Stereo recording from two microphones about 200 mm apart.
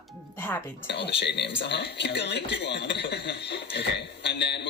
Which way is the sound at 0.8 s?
55° left (ahead or behind).